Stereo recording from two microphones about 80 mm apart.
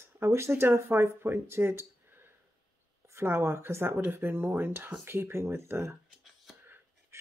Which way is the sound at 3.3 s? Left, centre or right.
Right.